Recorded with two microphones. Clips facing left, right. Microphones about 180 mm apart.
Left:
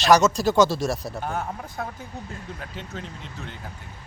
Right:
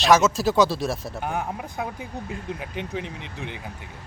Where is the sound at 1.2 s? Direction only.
10° right (ahead or behind).